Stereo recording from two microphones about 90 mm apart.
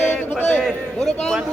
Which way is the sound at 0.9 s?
5° left (ahead or behind).